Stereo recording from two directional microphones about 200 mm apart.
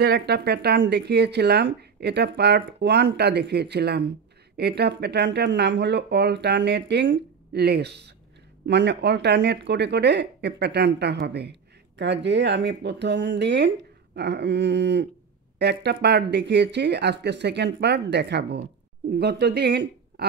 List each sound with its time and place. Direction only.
0.0 s speech: 55° right (ahead or behind)